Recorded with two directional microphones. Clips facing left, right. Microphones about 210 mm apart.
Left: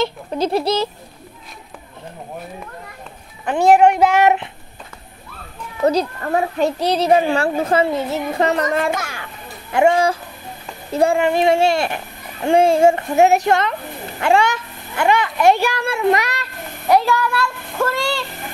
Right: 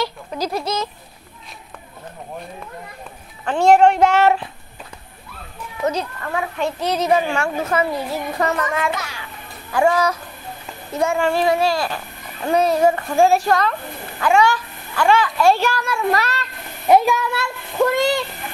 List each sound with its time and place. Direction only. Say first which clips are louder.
0.0 s a child's voice: left 4 dB; 25° left (ahead or behind)
3.4 s speech: left 1 dB; 15° left (ahead or behind)
5.9 s a child's voice: left 6 dB; 35° left (ahead or behind)
8.9 s a child's voice: left 3 dB; 50° left (ahead or behind)
9.7 s a child's voice: left 2 dB; 25° left (ahead or behind)
11.1 s a child's voice: left 2 dB; 20° left (ahead or behind)
16.8 s a child's voice: right 1 dB; 20° right (ahead or behind)